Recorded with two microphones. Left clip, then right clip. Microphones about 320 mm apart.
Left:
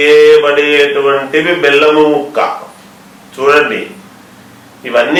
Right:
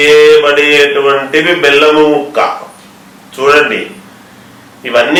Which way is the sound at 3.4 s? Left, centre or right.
Centre.